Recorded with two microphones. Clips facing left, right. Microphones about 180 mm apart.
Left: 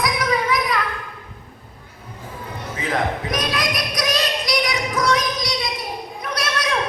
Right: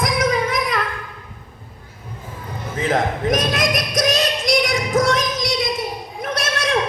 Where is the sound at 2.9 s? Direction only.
45° right (ahead or behind).